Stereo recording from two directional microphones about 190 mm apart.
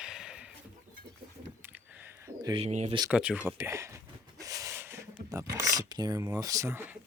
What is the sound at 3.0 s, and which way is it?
Speech, 5° right (ahead or behind).